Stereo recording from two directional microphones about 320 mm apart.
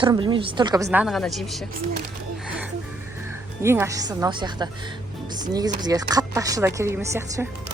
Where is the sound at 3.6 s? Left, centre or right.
Centre.